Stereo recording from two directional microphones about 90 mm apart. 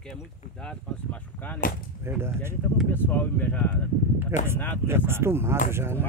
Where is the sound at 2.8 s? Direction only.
20° left (ahead or behind).